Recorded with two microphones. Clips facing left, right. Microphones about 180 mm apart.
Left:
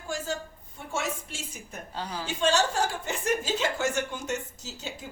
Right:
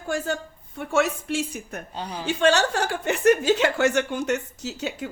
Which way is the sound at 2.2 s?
65° right (ahead or behind).